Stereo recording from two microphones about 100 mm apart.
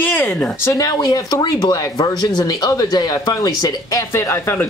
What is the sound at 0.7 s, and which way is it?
Speech, 40° left (ahead or behind).